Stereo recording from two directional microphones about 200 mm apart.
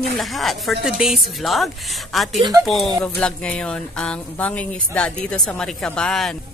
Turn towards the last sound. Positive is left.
turn(degrees=5)  # may be behind; listen again after turning